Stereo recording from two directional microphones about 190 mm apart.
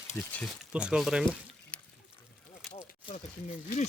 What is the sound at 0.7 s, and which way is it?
Speech, 5° right (ahead or behind).